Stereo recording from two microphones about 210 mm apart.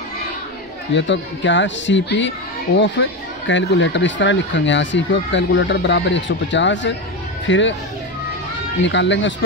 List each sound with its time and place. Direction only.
0.9 s a child's voice: 60° left (ahead or behind)
8.8 s a child's voice: 60° left (ahead or behind)